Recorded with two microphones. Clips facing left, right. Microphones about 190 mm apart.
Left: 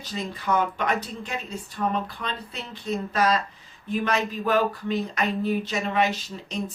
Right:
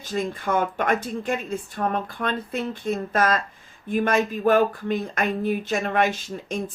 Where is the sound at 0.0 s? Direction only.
50° right (ahead or behind).